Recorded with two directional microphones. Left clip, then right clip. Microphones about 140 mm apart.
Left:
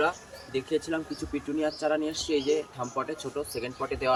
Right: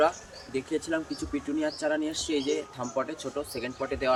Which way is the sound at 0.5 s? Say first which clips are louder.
Left 1 dB; 10° right (ahead or behind).